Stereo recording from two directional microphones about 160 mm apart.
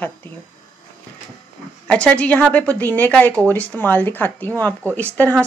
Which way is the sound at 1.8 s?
5° left (ahead or behind).